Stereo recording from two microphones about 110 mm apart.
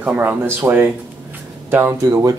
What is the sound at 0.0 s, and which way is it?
Speech, 15° right (ahead or behind).